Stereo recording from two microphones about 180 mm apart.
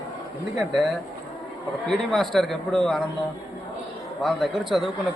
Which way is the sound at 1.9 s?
Centre (ahead or behind).